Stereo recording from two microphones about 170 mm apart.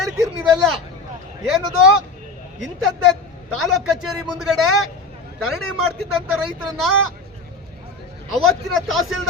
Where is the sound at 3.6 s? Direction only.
Centre (ahead or behind).